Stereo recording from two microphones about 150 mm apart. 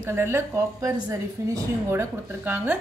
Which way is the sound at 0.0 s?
15° right (ahead or behind).